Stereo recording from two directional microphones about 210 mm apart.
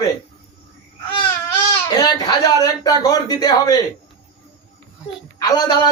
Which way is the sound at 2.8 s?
15° left (ahead or behind).